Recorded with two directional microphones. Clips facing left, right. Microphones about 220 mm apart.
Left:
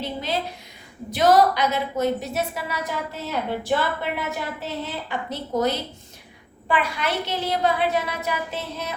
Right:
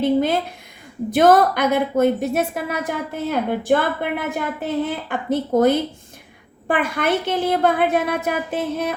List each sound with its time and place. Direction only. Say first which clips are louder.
0.0 s a woman's voice: right 10 dB; 50° right (ahead or behind)